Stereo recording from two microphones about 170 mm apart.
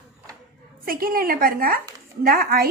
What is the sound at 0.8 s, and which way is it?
A woman's voice, 60° right (ahead or behind).